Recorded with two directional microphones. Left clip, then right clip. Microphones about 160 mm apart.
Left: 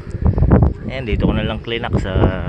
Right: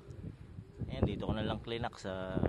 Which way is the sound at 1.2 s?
40° right (ahead or behind).